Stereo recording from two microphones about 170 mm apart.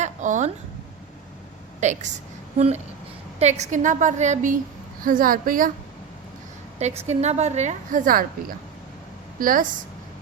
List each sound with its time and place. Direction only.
0.0 s a sound: 45° right (ahead or behind)
1.8 s a woman's voice: 45° right (ahead or behind)
6.7 s a woman's voice: 40° right (ahead or behind); by 9.6 s 55° right (ahead or behind)